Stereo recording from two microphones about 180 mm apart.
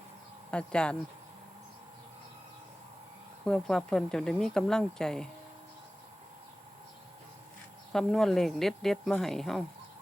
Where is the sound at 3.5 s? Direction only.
5° left (ahead or behind).